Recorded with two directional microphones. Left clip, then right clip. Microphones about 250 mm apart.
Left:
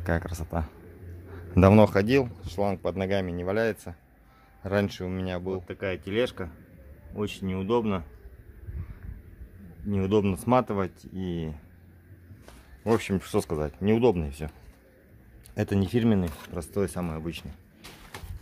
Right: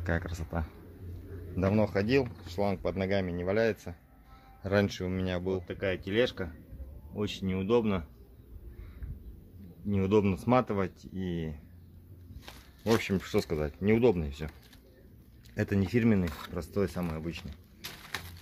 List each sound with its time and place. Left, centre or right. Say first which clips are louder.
0.0 s speech: left 4 dB; centre
1.5 s speech: left 10 dB; left; by 8.0 s centre
9.8 s speech: left 2 dB; centre
12.8 s speech: left 3 dB; centre
15.5 s speech: left 3 dB; centre